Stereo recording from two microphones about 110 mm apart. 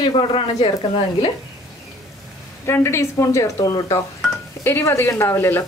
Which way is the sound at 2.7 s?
25° left (ahead or behind).